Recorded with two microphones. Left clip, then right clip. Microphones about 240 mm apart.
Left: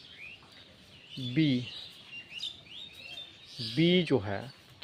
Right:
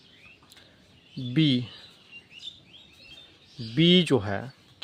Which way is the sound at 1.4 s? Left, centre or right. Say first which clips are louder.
Right 5 dB; right.